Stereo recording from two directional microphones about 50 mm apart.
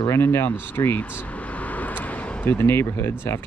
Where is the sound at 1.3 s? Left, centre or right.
Left.